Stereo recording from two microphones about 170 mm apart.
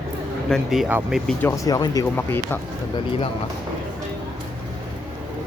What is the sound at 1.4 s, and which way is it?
Speech, 20° left (ahead or behind).